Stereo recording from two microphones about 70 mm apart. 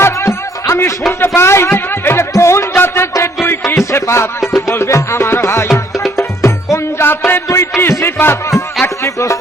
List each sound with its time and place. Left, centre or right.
0.0 s music: left
1.4 s a sound: left
2.3 s music: left